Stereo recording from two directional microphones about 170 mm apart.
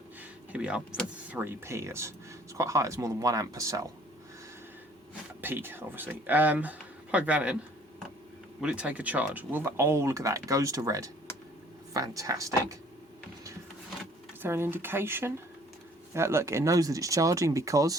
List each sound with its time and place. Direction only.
0.2 s a sound: 5° right (ahead or behind)
1.3 s speech: 10° right (ahead or behind)
5.4 s speech: 10° right (ahead or behind)
8.6 s speech: 5° right (ahead or behind)
14.4 s speech: 15° right (ahead or behind)